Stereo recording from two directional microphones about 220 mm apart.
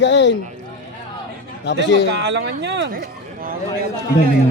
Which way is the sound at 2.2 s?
50° right (ahead or behind).